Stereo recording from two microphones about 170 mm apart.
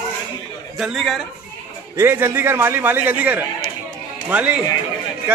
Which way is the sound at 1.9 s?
15° right (ahead or behind).